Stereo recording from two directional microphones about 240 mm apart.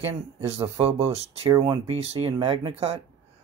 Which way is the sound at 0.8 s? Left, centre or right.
Right.